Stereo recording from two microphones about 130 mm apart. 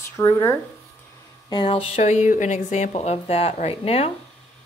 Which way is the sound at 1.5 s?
40° left (ahead or behind).